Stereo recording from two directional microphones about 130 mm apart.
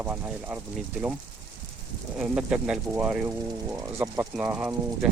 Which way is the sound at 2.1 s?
5° right (ahead or behind).